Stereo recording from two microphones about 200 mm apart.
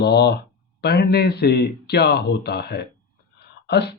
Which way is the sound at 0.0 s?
55° left (ahead or behind).